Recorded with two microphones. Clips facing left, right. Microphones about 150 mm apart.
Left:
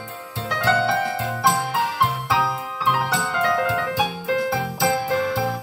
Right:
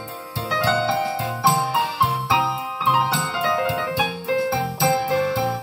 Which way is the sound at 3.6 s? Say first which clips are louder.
Left 1 dB; 25° right (ahead or behind).